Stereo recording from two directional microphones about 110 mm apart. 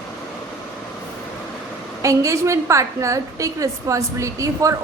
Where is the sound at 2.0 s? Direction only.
30° right (ahead or behind).